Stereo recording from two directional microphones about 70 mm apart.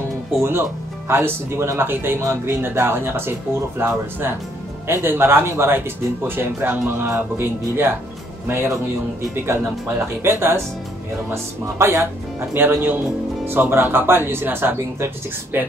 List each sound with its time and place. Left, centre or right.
0.4 s speech: right
10.2 s speech: right